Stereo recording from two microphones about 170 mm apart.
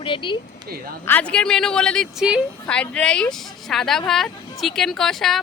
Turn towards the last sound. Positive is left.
turn(degrees=0)  # may be behind; listen again after turning